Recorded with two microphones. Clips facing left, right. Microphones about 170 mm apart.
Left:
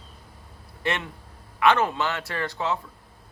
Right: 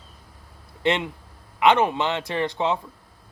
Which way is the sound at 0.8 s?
20° right (ahead or behind).